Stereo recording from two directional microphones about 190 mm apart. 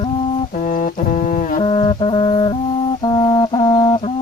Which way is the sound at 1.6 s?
25° left (ahead or behind).